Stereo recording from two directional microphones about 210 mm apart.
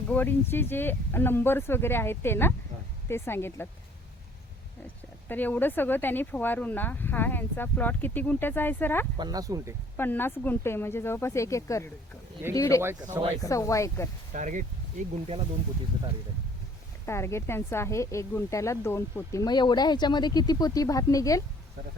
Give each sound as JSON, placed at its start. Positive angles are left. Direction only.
{"t": 0.1, "sound": "speech", "side_deg": 10}
{"t": 5.3, "sound": "speech", "side_deg": 10}
{"t": 9.1, "sound": "speech", "side_deg": -20}
{"t": 10.0, "sound": "speech", "side_deg": 10}
{"t": 14.3, "sound": "speech", "side_deg": -35}
{"t": 17.1, "sound": "speech", "side_deg": 10}